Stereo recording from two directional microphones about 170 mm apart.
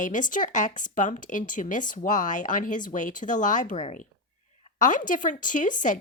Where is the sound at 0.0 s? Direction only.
50° left (ahead or behind).